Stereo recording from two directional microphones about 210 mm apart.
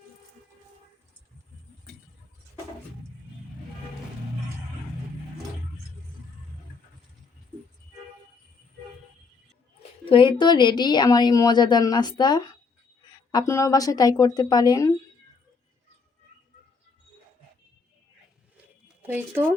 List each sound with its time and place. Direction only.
10.1 s a woman's voice: 25° left (ahead or behind)
19.0 s speech: 10° right (ahead or behind)